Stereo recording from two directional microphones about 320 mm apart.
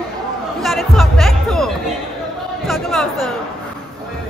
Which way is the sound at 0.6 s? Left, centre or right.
Centre.